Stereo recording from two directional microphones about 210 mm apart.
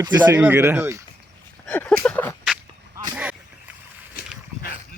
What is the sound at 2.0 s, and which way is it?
Speech, 5° left (ahead or behind).